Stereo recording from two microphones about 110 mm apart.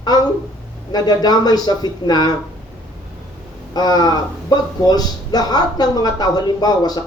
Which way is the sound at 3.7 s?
40° left (ahead or behind).